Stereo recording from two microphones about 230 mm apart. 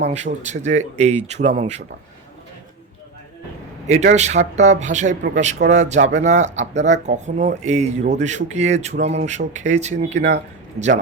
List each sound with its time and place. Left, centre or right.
0.1 s speech: right
3.8 s speech: right